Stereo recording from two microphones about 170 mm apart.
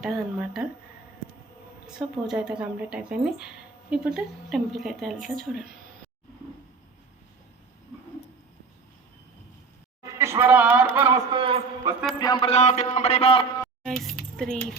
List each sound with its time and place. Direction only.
0.0 s a woman's voice: centre (ahead or behind)
2.0 s a woman's voice: centre (ahead or behind)
10.2 s a man's voice: 15° right (ahead or behind)
11.3 s a man's voice: 30° right (ahead or behind)
12.2 s a man's voice: 25° left (ahead or behind)
12.5 s speech: 40° left (ahead or behind)
13.8 s speech: 5° left (ahead or behind)